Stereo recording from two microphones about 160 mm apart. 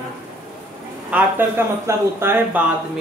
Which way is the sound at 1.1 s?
10° right (ahead or behind).